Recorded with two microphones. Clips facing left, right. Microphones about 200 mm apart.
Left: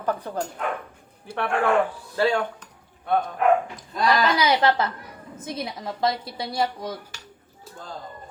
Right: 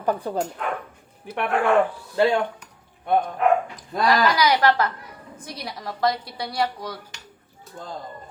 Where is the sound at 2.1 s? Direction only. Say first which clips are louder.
Right 3 dB; 20° right (ahead or behind).